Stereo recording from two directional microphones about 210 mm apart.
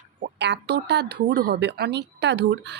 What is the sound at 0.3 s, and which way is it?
Speech, 55° right (ahead or behind).